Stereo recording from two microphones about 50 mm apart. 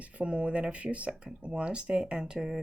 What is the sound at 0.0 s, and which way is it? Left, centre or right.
Speech, right.